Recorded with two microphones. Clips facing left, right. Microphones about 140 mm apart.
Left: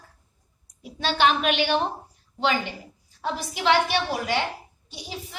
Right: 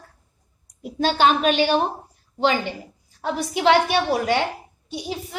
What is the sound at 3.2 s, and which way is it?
A woman's voice, 50° right (ahead or behind).